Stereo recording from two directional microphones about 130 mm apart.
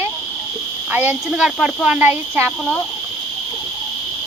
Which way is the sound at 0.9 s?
15° right (ahead or behind).